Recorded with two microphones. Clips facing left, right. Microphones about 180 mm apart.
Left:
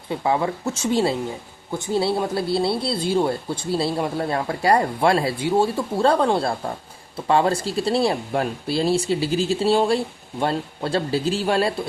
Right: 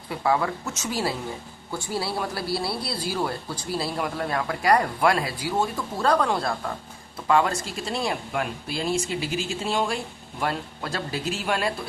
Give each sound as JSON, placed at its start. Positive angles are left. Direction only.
{"t": 0.1, "sound": "a man's voice", "side_deg": 20}